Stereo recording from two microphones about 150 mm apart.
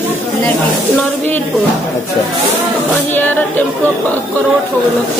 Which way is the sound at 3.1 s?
10° left (ahead or behind).